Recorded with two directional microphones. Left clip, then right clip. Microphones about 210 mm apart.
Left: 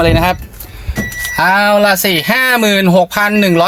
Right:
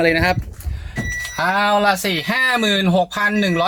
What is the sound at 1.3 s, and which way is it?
Speech, 20° left (ahead or behind).